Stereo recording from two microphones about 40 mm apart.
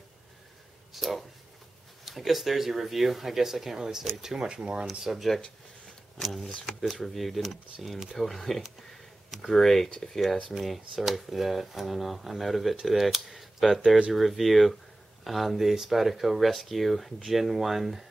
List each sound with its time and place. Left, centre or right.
0.9 s speech: centre
4.5 s speech: right
6.2 s speech: centre
13.8 s speech: right
14.1 s speech: centre